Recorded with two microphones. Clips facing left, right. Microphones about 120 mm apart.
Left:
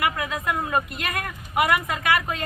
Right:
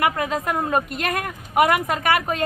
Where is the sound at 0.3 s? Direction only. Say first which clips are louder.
Right 3 dB; 40° right (ahead or behind).